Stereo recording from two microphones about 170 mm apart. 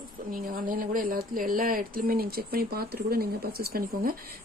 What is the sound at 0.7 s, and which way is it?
Speech, 55° right (ahead or behind).